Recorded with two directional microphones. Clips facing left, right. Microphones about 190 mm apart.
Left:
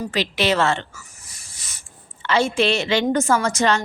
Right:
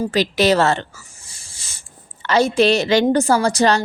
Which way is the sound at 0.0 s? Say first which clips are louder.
Right 5 dB; 40° right (ahead or behind).